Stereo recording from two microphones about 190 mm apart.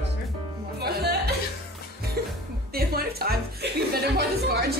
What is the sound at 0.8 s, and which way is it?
Music, 55° right (ahead or behind).